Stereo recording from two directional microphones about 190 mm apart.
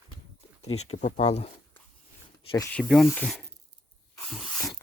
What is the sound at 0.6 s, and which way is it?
Speech, 35° left (ahead or behind).